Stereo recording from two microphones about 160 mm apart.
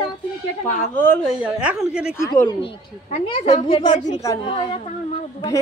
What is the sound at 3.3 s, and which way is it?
A man's voice, 35° left (ahead or behind).